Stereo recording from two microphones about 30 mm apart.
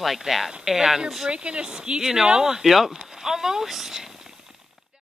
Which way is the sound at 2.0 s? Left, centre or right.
Centre.